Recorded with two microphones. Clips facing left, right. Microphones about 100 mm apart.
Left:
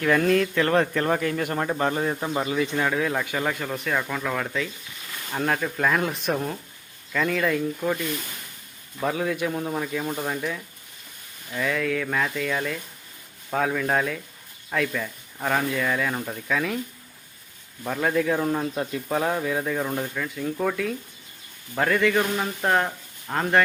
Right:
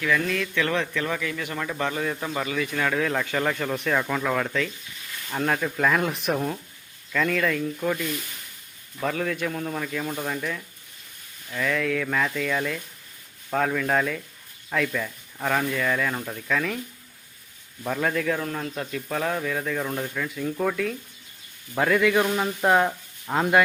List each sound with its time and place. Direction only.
0.0 s speech: 50° left (ahead or behind)
1.8 s speech: 35° left (ahead or behind)
2.9 s speech: 10° left (ahead or behind)
17.8 s speech: 5° left (ahead or behind)